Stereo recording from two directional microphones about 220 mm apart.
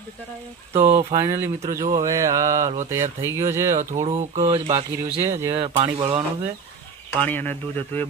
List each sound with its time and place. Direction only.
0.7 s speech: 15° right (ahead or behind)
3.9 s speech: 30° right (ahead or behind)
4.7 s speech: 10° right (ahead or behind)
5.5 s speech: 25° right (ahead or behind)
7.2 s speech: 10° left (ahead or behind)